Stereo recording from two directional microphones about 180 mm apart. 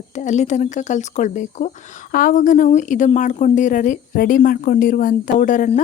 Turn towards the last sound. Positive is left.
turn(degrees=45)  # may be behind; listen again after turning